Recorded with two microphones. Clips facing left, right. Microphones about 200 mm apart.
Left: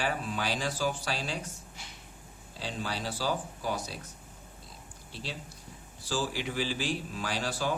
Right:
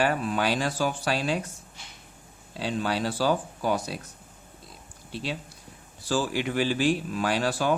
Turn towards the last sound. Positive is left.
turn(degrees=-60)  # may be behind; listen again after turning